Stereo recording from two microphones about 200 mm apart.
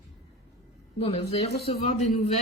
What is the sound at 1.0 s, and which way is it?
Speech, 30° left (ahead or behind).